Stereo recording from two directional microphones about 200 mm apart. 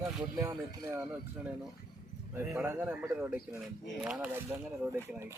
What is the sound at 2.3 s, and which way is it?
Speech, 10° right (ahead or behind).